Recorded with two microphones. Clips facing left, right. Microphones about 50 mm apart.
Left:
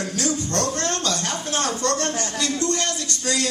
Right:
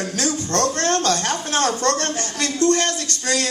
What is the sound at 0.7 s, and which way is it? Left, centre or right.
Speech, right.